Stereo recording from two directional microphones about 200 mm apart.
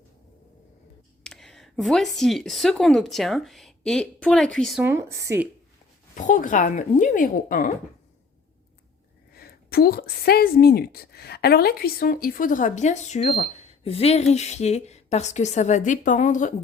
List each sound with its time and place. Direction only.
1.2 s speech: centre (ahead or behind)
4.8 s speech: 15° right (ahead or behind)
6.1 s a woman's voice: 40° left (ahead or behind)
9.3 s a woman's voice: 50° left (ahead or behind)